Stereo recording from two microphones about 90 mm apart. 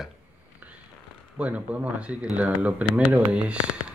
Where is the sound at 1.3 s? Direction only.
15° right (ahead or behind).